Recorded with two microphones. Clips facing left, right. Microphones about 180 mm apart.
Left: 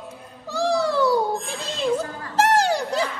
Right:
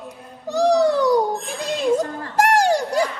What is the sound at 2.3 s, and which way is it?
Music, 15° right (ahead or behind).